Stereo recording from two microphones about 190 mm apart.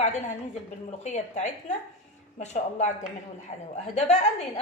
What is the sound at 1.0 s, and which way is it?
A woman's voice, 35° left (ahead or behind).